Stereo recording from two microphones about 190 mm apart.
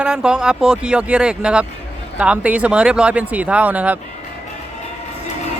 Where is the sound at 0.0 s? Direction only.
5° right (ahead or behind).